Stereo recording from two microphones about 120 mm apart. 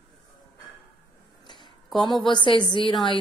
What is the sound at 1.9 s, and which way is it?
A woman's voice, 40° left (ahead or behind).